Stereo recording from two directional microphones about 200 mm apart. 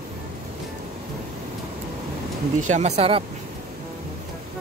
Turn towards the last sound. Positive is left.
turn(degrees=-30)  # may be behind; listen again after turning